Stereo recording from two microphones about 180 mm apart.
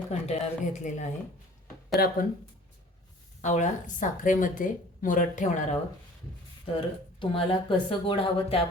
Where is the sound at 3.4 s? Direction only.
40° left (ahead or behind).